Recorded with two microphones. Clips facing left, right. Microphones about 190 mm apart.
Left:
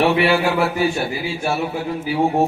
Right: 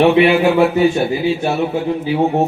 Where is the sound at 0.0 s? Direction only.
20° right (ahead or behind).